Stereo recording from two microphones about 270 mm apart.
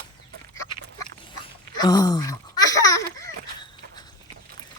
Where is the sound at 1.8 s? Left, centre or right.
Centre.